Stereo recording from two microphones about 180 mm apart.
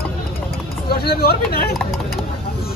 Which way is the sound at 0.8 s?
60° left (ahead or behind).